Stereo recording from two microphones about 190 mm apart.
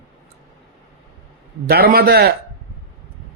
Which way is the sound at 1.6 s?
50° right (ahead or behind).